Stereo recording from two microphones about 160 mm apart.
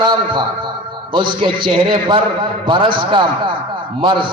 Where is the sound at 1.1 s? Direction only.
30° right (ahead or behind).